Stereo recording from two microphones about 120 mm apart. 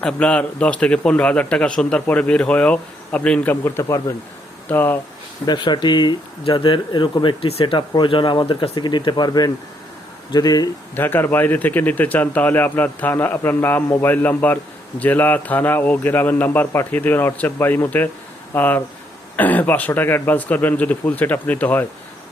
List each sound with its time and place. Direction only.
0.0 s speech: 10° left (ahead or behind); by 4.1 s 25° left (ahead or behind)
4.7 s speech: 15° left (ahead or behind)
5.5 s speech: 40° left (ahead or behind)
10.9 s speech: 15° left (ahead or behind)